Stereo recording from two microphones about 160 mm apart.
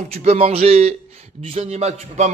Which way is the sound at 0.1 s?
40° right (ahead or behind).